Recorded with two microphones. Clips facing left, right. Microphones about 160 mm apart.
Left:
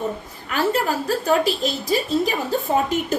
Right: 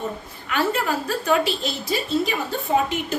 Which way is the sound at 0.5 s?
35° left (ahead or behind).